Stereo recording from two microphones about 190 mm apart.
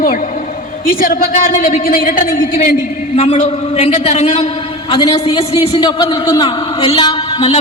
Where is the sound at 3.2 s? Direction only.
35° left (ahead or behind).